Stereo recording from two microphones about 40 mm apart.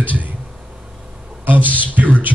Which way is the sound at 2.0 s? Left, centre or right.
Right.